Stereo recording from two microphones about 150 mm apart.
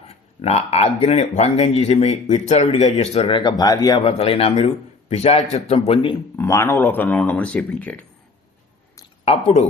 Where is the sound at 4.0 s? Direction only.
40° left (ahead or behind).